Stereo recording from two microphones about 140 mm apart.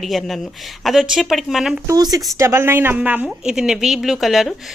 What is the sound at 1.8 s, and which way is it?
A woman's voice, 25° right (ahead or behind).